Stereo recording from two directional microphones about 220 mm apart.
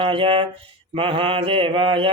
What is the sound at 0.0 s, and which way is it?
Mantra, 25° right (ahead or behind).